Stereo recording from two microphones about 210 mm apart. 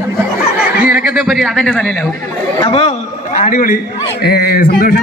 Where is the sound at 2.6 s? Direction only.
25° left (ahead or behind); by 4.7 s 45° left (ahead or behind).